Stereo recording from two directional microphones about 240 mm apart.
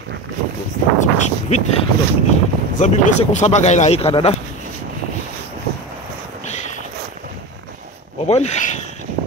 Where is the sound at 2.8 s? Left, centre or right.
Left.